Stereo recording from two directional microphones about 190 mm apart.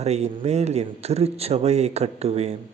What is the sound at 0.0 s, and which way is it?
Speech, 35° right (ahead or behind).